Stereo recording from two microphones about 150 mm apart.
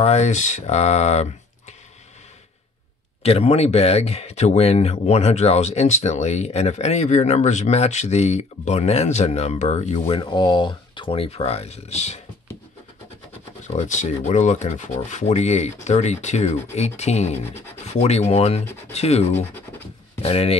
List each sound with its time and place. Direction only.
0.0 s speech: 45° left (ahead or behind)
3.2 s speech: 40° left (ahead or behind)
13.7 s speech: 55° left (ahead or behind)